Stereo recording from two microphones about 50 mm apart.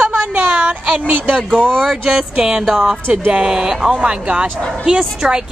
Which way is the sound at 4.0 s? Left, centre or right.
Right.